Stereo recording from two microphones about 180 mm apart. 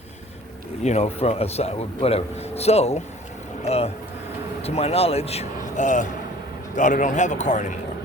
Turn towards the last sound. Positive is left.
turn(degrees=45)  # may be behind; listen again after turning